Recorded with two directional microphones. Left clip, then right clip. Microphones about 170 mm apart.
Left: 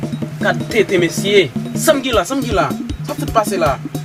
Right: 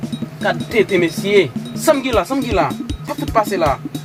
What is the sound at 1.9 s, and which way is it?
Speech, centre (ahead or behind).